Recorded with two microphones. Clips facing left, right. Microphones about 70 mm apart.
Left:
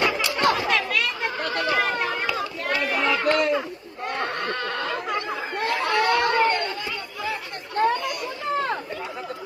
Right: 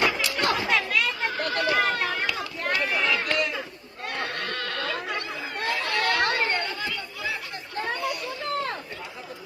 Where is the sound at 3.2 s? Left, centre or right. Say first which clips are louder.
Left 6 dB; left.